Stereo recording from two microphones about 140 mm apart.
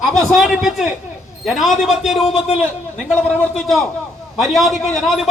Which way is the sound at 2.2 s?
45° left (ahead or behind).